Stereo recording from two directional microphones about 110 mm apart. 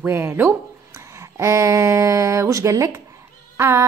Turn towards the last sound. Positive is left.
turn(degrees=-25)  # may be behind; listen again after turning